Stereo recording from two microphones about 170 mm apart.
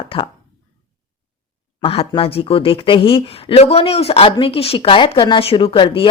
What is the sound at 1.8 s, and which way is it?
Speech, 30° left (ahead or behind).